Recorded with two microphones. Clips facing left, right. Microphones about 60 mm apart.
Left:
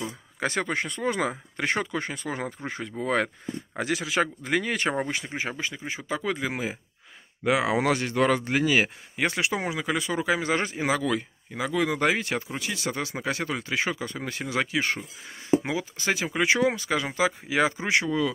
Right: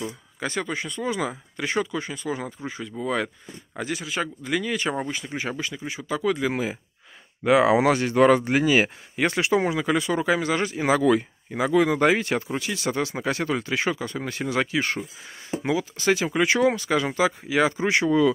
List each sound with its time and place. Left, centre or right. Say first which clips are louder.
0.4 s speech: left 1 dB; left
3.8 s speech: left 2 dB; left
4.4 s speech: even; left
5.6 s speech: right 1 dB; left
6.4 s speech: right 4 dB; centre
9.1 s speech: right 5 dB; centre
10.4 s speech: right 2 dB; left
10.9 s speech: right 8 dB; centre
15.5 s speech: left 1 dB; centre
18.0 s speech: right 7 dB; centre